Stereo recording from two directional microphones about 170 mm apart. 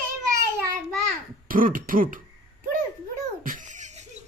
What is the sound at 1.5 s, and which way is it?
Throat clearing, 55° right (ahead or behind).